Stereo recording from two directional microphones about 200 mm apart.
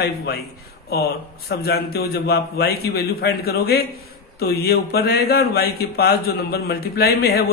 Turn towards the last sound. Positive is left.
turn(degrees=50)  # may be behind; listen again after turning